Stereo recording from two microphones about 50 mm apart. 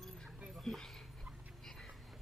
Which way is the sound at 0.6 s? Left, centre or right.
Centre.